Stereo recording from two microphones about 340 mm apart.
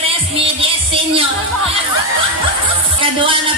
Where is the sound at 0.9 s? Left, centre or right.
Centre.